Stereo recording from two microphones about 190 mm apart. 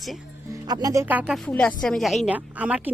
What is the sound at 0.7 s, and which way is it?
Speech, 20° right (ahead or behind).